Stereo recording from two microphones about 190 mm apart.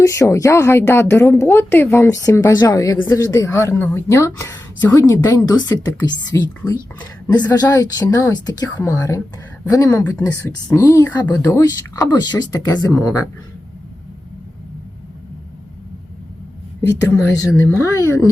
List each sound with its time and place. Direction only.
0.0 s speech: 15° left (ahead or behind)
11.6 s speech: 20° left (ahead or behind)
17.6 s speech: 15° left (ahead or behind)